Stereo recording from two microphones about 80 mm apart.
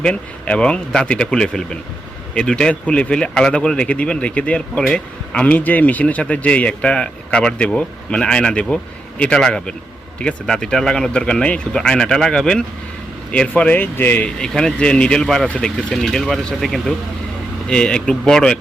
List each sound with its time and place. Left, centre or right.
0.0 s speech: centre
13.5 s speech: left
14.3 s speech: centre